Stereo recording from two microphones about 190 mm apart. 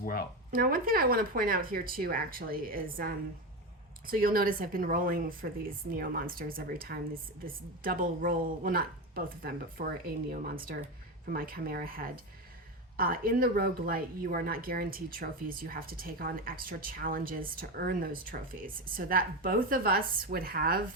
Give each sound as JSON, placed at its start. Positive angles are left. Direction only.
{"t": 0.0, "sound": "speech", "side_deg": 50}
{"t": 0.5, "sound": "speech", "side_deg": -50}